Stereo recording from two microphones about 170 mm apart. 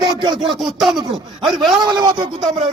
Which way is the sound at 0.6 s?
Centre (ahead or behind).